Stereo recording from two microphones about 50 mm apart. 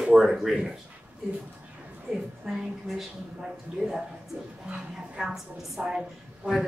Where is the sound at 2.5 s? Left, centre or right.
Centre.